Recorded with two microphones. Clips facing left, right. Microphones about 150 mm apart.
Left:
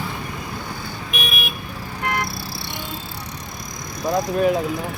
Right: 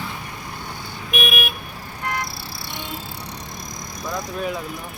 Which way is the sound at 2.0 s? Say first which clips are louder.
Left 3 dB; 60° left (ahead or behind).